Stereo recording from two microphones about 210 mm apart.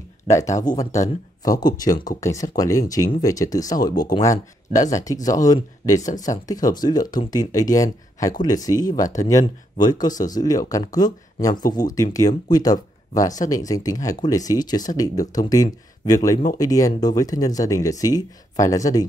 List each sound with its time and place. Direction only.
0.3 s speech: 15° left (ahead or behind)